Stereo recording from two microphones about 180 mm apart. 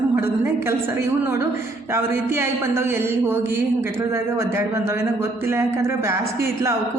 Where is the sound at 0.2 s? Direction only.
15° right (ahead or behind).